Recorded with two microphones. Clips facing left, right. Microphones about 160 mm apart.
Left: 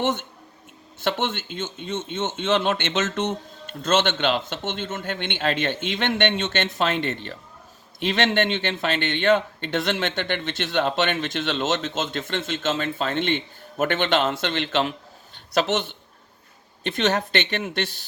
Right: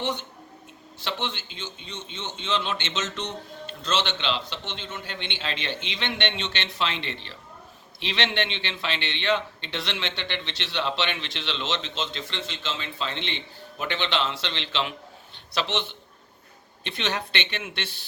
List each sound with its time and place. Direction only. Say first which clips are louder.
0.0 s a man's voice: left 5 dB; 50° left (ahead or behind)